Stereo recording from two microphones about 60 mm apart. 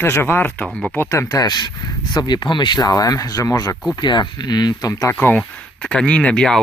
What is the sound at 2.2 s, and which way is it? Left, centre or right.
Speech, left.